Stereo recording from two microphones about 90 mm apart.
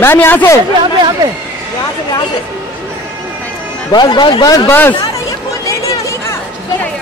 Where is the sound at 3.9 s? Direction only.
55° left (ahead or behind).